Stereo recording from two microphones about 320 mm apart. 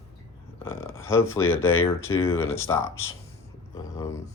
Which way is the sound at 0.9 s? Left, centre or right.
Centre.